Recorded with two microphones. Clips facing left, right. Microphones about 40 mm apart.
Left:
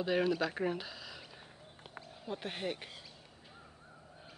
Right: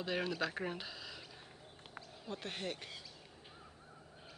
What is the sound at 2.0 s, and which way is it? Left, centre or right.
Speech, centre.